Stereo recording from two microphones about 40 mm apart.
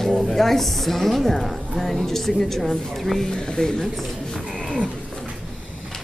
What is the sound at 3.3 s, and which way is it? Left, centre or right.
Speech, centre.